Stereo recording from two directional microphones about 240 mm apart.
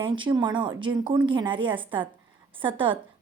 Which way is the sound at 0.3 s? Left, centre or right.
Centre.